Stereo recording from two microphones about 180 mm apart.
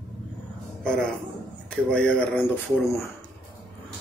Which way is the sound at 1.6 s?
5° left (ahead or behind).